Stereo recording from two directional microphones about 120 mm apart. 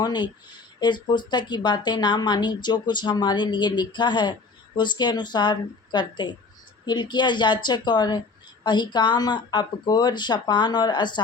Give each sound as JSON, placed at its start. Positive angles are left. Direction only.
{"t": 0.0, "sound": "a woman's voice", "side_deg": 35}